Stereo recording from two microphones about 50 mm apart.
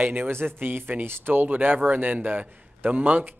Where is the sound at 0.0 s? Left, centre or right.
Right.